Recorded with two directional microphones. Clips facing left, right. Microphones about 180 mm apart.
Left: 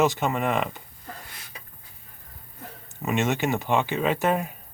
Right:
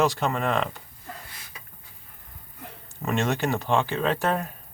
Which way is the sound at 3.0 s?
5° left (ahead or behind).